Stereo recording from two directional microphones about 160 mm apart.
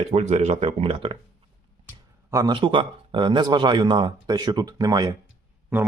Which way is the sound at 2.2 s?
20° right (ahead or behind).